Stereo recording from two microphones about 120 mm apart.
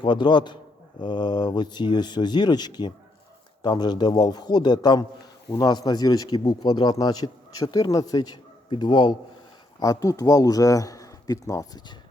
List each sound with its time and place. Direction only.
0.0 s speech: 40° left (ahead or behind)
9.8 s speech: 30° left (ahead or behind)